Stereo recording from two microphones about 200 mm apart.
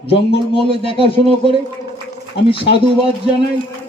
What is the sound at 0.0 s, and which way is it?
A man's voice, 30° left (ahead or behind).